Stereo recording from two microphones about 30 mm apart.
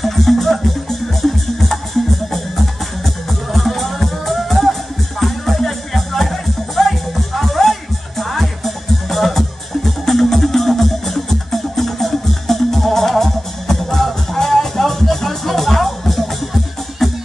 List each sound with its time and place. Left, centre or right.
0.0 s music: centre
3.3 s music: centre